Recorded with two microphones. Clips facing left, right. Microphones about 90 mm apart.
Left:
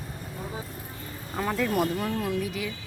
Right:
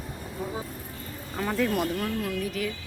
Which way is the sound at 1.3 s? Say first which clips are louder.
Even; 5° left (ahead or behind).